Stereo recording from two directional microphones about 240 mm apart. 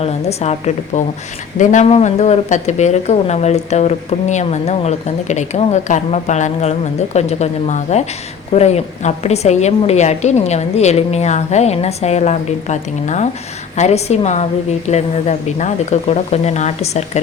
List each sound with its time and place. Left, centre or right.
0.0 s speech: left